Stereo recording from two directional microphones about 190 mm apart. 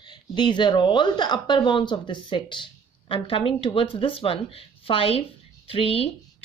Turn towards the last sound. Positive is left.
turn(degrees=30)  # may be behind; listen again after turning